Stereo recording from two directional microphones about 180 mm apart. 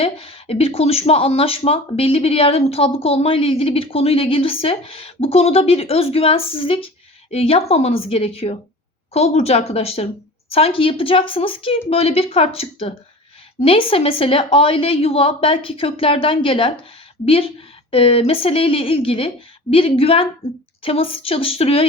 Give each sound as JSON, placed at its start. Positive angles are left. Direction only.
{"t": 0.0, "sound": "speech", "side_deg": 30}